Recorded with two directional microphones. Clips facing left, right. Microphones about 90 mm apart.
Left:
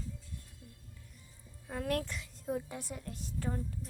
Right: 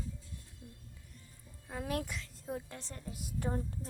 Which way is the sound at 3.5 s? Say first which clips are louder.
Right 2 dB; 35° right (ahead or behind).